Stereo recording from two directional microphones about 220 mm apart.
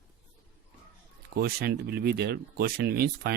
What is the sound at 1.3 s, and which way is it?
Speech, 45° right (ahead or behind).